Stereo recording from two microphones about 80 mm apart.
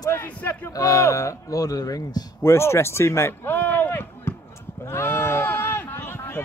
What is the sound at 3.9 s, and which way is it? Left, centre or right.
Chop, left.